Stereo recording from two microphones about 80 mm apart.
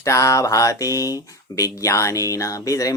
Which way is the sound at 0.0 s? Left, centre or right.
Left.